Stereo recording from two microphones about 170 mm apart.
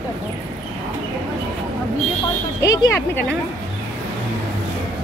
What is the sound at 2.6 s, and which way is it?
Speech, 15° left (ahead or behind).